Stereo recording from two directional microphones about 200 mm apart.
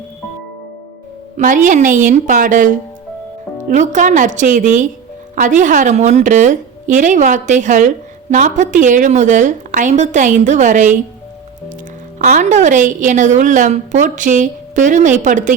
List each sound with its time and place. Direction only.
1.4 s a woman's voice: 40° right (ahead or behind)
12.2 s a woman's voice: 40° right (ahead or behind)